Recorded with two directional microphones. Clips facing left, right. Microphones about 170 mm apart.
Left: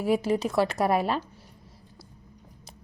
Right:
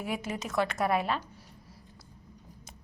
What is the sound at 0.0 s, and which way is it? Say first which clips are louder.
A woman's voice: left 10 dB; 35° left (ahead or behind).